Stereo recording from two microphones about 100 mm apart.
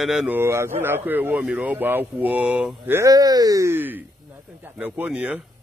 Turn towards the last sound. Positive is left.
turn(degrees=-10)  # may be behind; listen again after turning